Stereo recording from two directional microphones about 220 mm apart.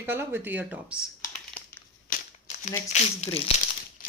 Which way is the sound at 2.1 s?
35° left (ahead or behind).